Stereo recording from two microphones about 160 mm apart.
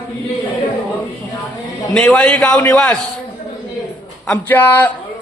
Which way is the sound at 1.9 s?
5° left (ahead or behind).